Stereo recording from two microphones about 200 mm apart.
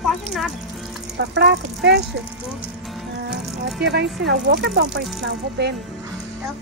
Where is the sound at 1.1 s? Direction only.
60° right (ahead or behind).